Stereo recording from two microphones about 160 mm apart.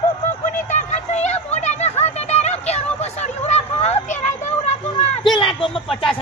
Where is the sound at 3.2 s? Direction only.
45° left (ahead or behind).